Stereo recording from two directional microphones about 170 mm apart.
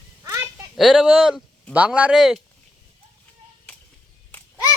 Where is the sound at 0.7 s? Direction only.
5° right (ahead or behind).